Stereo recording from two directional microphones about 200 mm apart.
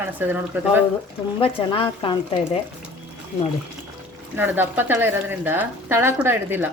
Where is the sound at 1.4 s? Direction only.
25° left (ahead or behind).